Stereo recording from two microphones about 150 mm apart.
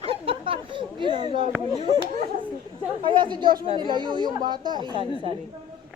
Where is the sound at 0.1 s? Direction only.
35° right (ahead or behind).